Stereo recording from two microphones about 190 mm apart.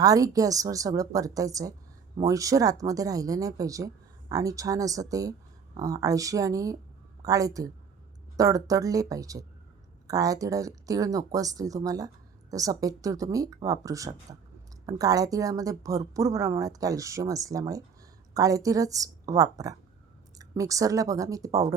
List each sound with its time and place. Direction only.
0.0 s speech: 20° right (ahead or behind)